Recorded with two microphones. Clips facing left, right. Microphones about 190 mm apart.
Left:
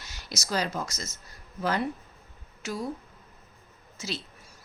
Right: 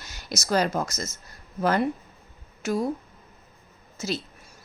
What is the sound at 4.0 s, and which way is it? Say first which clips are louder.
Speech: right 6 dB; 45° right (ahead or behind).